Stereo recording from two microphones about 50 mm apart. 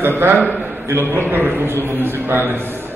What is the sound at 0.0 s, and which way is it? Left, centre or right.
A man's voice, right.